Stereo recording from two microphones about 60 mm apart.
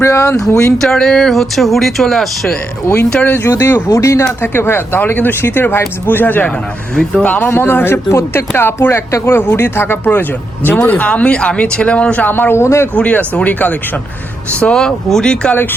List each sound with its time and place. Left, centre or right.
0.0 s speech: left
0.3 s speech: left
0.8 s speech: centre
2.8 s speech: left
3.8 s speech: left
4.5 s speech: left
6.9 s speech: centre
7.3 s speech: left
12.3 s speech: left
12.6 s speech: left
13.0 s speech: left
14.6 s speech: centre